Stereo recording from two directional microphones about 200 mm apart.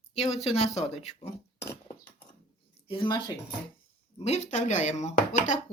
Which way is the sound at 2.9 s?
25° left (ahead or behind).